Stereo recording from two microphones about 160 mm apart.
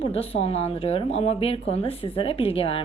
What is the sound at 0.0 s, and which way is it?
A woman's voice, 40° left (ahead or behind).